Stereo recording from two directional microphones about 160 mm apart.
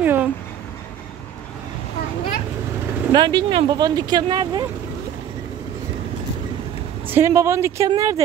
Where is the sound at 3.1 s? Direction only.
25° right (ahead or behind).